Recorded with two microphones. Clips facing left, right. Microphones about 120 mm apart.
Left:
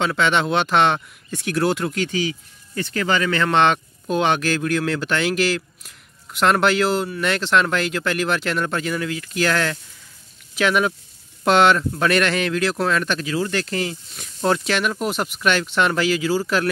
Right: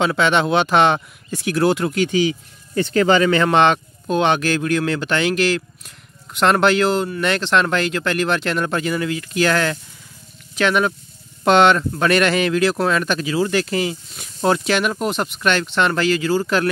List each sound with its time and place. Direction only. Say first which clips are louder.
0.0 s speech: right 3 dB; 5° right (ahead or behind)
2.0 s speech: right 6 dB; 20° right (ahead or behind)
3.5 s speech: right 2 dB; centre (ahead or behind)